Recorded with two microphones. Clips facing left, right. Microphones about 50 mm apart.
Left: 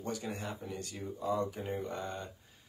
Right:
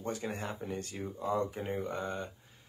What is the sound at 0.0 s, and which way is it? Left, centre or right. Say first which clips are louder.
Speech: right 2 dB; right.